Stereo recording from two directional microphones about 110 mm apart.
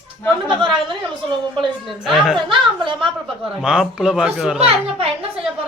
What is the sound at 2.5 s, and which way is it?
A woman's voice, 50° right (ahead or behind).